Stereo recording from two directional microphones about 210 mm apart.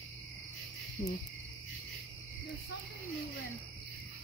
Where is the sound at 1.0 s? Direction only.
40° left (ahead or behind).